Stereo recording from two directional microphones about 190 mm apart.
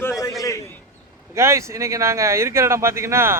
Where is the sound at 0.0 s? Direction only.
15° left (ahead or behind).